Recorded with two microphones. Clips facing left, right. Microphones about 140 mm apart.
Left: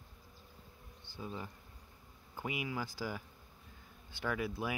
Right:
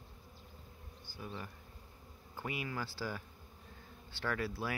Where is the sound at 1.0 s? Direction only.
25° left (ahead or behind).